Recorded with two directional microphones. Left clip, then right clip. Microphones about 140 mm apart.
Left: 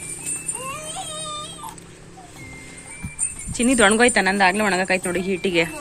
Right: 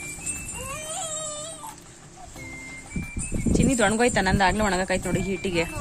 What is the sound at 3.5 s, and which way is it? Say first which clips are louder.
Speech: left 6 dB; 5° right (ahead or behind).